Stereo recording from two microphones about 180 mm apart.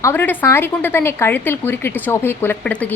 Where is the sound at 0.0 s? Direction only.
10° left (ahead or behind).